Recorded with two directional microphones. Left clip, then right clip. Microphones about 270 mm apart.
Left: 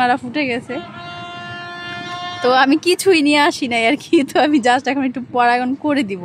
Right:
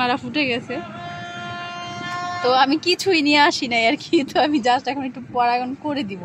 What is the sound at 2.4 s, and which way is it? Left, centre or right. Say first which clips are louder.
Speech: left 4 dB; left.